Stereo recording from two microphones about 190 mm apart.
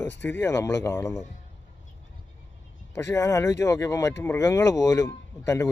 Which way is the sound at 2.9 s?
15° left (ahead or behind).